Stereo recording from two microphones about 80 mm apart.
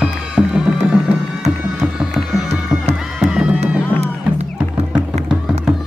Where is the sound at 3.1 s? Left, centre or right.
Centre.